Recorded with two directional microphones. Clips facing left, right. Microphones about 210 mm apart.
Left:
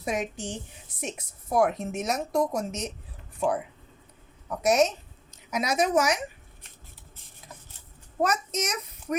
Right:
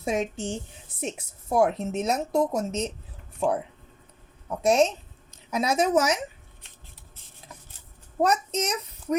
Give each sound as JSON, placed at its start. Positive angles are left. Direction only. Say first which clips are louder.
{"t": 0.0, "sound": "a woman's voice", "louder": "right 3 dB", "side_deg": -25}
{"t": 4.4, "sound": "a woman's voice", "louder": "right 1 dB", "side_deg": -30}
{"t": 8.5, "sound": "a child's voice", "louder": "right 3 dB", "side_deg": -30}